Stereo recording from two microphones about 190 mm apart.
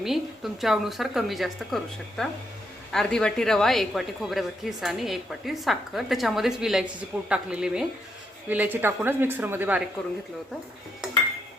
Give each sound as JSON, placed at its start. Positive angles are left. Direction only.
{"t": 0.0, "sound": "a woman's voice", "side_deg": 0}